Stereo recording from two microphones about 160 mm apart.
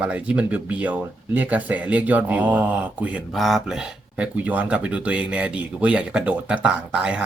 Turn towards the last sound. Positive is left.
turn(degrees=-5)  # may be behind; listen again after turning